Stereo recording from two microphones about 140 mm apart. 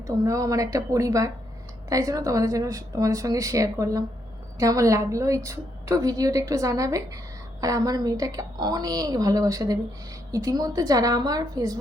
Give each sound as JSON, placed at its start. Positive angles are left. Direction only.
{"t": 0.2, "sound": "a woman's voice", "side_deg": -25}